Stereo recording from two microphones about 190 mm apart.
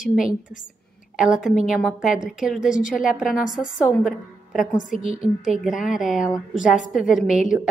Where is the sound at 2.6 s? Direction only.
45° left (ahead or behind).